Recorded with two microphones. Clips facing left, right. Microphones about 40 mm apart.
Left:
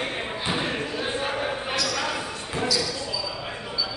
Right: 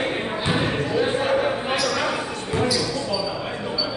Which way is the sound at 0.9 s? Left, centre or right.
Centre.